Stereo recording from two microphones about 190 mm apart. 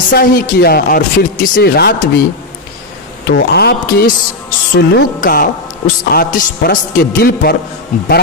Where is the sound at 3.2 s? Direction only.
60° left (ahead or behind).